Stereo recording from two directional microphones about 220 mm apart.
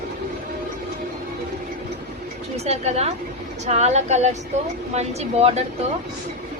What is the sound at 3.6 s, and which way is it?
A woman's voice, 30° right (ahead or behind).